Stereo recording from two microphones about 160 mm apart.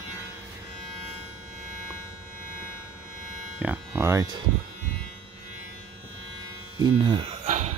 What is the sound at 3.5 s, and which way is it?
Speech, 10° right (ahead or behind).